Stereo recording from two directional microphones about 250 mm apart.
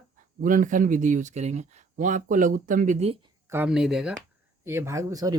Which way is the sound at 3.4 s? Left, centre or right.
Centre.